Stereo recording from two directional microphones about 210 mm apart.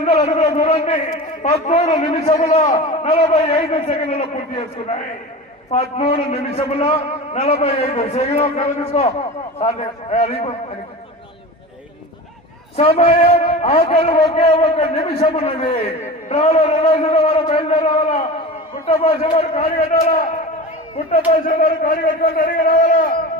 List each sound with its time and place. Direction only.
0.0 s a man's voice: 30° left (ahead or behind)
12.7 s a man's voice: 30° left (ahead or behind)
21.4 s a man's voice: 40° left (ahead or behind)